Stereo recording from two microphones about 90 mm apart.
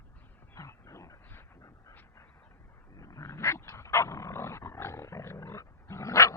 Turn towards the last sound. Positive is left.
turn(degrees=35)  # may be behind; listen again after turning